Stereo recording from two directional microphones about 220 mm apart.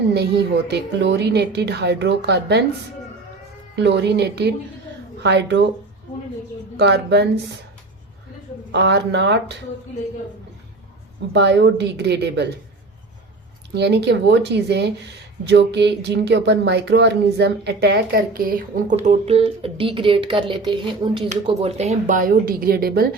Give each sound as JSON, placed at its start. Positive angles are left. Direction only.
{"t": 0.1, "sound": "a woman's voice", "side_deg": -50}
{"t": 3.8, "sound": "a woman's voice", "side_deg": -50}
{"t": 6.7, "sound": "a woman's voice", "side_deg": -50}
{"t": 8.7, "sound": "a woman's voice", "side_deg": -50}
{"t": 11.3, "sound": "a woman's voice", "side_deg": -50}
{"t": 13.7, "sound": "a woman's voice", "side_deg": -50}